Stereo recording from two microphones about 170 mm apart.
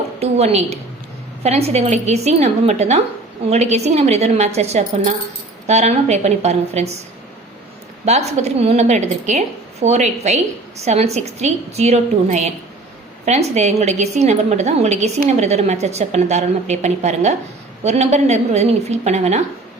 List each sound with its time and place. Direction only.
0.2 s a woman's voice: 40° right (ahead or behind)
8.0 s a woman's voice: 40° right (ahead or behind)